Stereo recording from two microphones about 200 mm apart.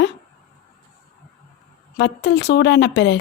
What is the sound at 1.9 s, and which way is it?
A woman's voice, 60° left (ahead or behind).